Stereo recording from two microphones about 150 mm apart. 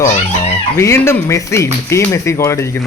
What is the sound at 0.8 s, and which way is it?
Speech, 15° left (ahead or behind).